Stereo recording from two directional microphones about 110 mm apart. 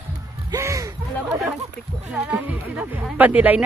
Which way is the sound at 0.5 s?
30° right (ahead or behind).